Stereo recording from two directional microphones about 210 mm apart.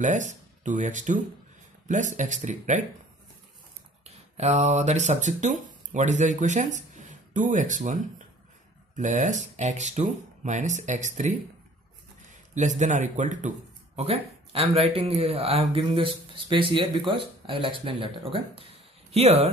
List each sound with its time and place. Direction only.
0.0 s speech: 35° right (ahead or behind)
4.0 s a man's voice: 30° right (ahead or behind)